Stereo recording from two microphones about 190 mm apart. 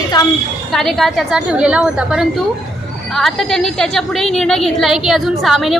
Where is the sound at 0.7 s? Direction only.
Centre (ahead or behind).